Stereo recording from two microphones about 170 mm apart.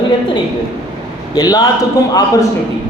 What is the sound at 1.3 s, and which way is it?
Speech, 25° left (ahead or behind).